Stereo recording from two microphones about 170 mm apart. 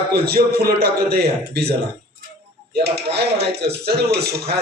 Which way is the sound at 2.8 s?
75° right (ahead or behind).